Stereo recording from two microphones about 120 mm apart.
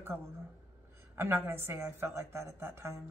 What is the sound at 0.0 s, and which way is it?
A woman's voice, 20° right (ahead or behind).